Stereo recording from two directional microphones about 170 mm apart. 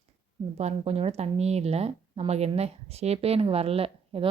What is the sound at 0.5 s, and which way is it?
A woman's voice, 40° right (ahead or behind).